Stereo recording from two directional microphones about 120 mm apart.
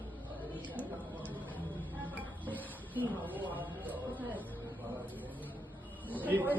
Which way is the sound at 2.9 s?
15° right (ahead or behind).